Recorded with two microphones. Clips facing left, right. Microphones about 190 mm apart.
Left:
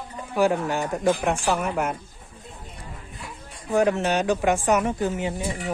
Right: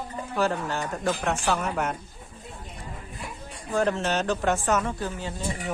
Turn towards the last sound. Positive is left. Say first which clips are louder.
# left 6 dB
turn(degrees=15)  # may be behind; listen again after turning